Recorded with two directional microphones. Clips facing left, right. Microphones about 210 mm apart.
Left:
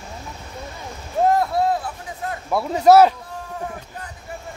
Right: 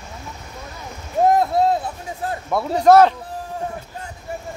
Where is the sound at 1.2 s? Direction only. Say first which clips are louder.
Right 2 dB; 20° right (ahead or behind).